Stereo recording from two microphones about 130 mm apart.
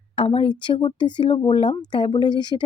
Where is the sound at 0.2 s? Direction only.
40° left (ahead or behind).